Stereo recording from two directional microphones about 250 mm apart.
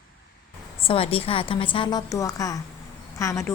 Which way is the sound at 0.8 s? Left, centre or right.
Left.